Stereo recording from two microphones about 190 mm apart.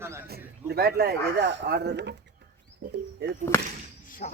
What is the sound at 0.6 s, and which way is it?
Speech, 55° right (ahead or behind).